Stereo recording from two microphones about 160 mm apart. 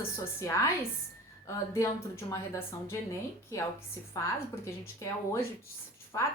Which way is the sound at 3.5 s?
20° left (ahead or behind).